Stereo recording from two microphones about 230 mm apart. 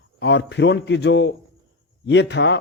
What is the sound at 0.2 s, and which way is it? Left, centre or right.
Speech, left.